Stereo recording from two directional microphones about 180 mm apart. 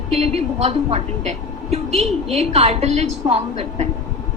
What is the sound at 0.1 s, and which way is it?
A woman's voice, 35° right (ahead or behind).